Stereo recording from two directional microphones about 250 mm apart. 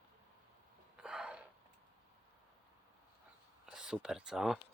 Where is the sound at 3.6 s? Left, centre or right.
Centre.